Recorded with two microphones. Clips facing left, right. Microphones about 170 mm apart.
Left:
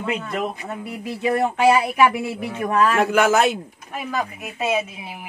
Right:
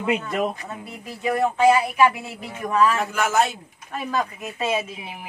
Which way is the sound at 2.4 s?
60° left (ahead or behind).